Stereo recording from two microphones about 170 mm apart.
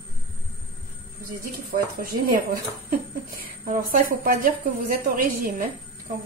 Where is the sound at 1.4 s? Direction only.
55° right (ahead or behind).